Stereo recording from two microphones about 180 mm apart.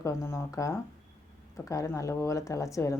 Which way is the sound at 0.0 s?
15° left (ahead or behind).